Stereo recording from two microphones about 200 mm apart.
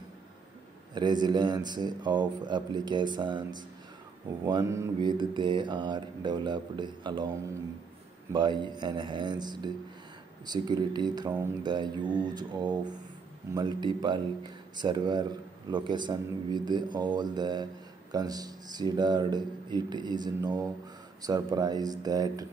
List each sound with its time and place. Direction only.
0.9 s mantra: 20° right (ahead or behind)
8.3 s mantra: 20° right (ahead or behind)